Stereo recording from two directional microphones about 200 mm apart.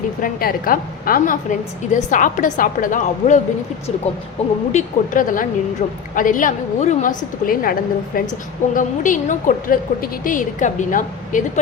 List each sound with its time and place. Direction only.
0.2 s a woman's voice: 45° left (ahead or behind)
4.7 s a woman's voice: 40° left (ahead or behind)